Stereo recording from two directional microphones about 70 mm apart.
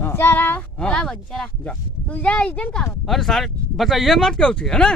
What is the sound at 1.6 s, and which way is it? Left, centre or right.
Speech, left.